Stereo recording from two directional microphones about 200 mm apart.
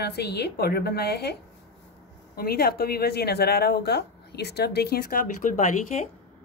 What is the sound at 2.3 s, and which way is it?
A woman's voice, 50° left (ahead or behind).